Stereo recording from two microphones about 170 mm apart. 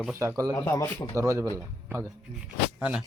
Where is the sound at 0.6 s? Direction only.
15° left (ahead or behind).